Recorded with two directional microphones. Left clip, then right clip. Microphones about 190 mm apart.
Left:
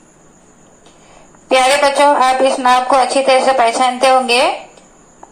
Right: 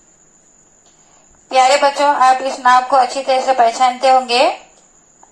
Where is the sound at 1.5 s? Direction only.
20° left (ahead or behind).